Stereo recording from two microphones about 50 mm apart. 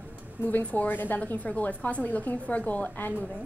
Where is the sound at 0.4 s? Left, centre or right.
Left.